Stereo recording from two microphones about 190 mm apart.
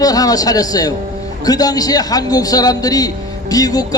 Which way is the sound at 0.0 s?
20° left (ahead or behind).